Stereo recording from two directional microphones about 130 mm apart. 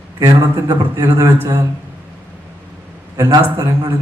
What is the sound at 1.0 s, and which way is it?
Speech, 20° right (ahead or behind).